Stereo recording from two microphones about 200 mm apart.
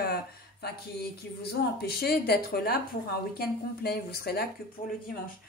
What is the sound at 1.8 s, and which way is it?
Speech, 50° left (ahead or behind).